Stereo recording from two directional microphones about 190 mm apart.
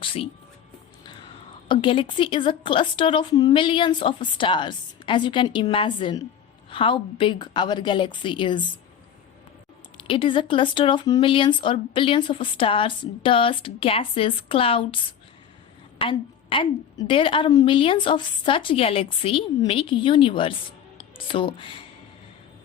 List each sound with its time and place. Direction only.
0.0 s speech: 30° left (ahead or behind)
1.6 s speech: 25° left (ahead or behind)
10.0 s speech: 25° left (ahead or behind)